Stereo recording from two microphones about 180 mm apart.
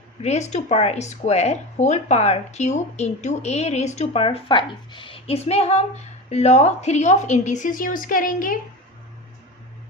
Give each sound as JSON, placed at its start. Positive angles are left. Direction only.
{"t": 0.2, "sound": "a woman's voice", "side_deg": 40}